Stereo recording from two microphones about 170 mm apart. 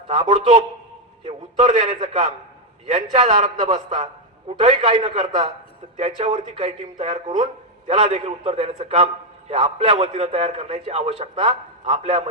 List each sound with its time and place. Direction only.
0.1 s a man's voice: 35° right (ahead or behind)